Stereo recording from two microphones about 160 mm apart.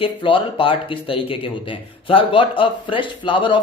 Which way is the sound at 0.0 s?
35° left (ahead or behind).